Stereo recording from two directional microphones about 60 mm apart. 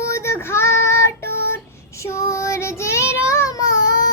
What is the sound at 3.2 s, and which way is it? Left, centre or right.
Child singing, left.